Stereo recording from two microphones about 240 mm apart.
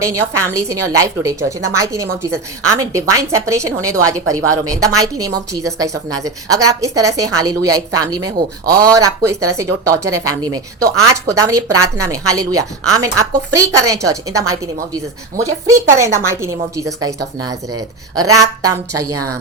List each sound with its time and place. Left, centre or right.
0.0 s a woman's voice: centre
15.7 s a woman's voice: centre
19.1 s a woman's voice: right